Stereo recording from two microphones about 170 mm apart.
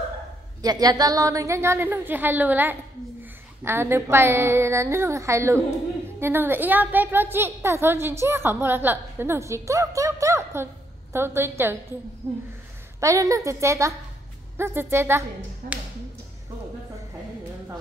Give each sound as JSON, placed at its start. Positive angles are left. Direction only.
{"t": 0.6, "sound": "a woman's voice", "side_deg": -20}
{"t": 15.6, "sound": "speech", "side_deg": -55}